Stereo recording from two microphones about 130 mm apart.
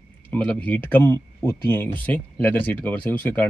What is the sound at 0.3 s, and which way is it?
Speech, 10° left (ahead or behind).